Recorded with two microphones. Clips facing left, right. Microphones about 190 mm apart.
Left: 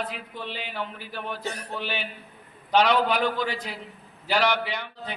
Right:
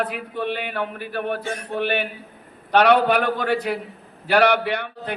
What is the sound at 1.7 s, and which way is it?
A man's voice, 60° right (ahead or behind).